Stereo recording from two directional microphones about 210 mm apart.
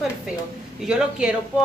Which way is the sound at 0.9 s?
5° right (ahead or behind).